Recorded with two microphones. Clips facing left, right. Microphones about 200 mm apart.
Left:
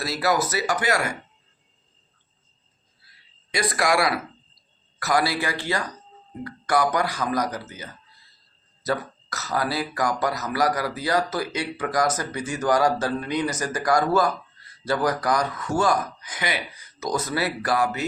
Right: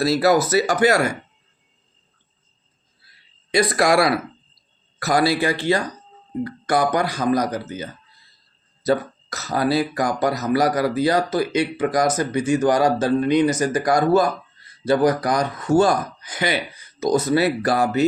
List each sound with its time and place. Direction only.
0.0 s speech: 30° right (ahead or behind)
3.5 s speech: 30° right (ahead or behind)
8.9 s speech: 25° right (ahead or behind)